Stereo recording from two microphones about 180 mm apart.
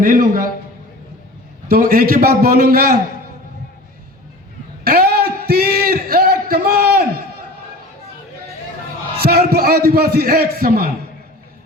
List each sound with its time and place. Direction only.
0.0 s a man's voice: 50° right (ahead or behind)
1.6 s a man's voice: 55° right (ahead or behind)
4.8 s a sound: 55° right (ahead or behind)
9.2 s a man's voice: 60° right (ahead or behind)